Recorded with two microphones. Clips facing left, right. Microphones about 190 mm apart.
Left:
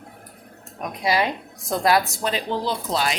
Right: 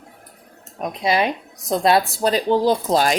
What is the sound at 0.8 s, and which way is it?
A woman's voice, 20° right (ahead or behind).